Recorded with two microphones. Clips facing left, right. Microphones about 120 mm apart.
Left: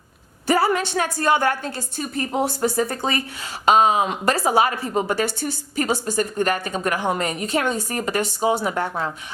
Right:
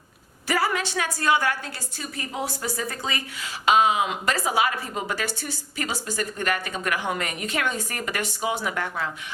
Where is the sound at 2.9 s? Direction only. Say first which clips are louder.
Left 6 dB; 40° left (ahead or behind).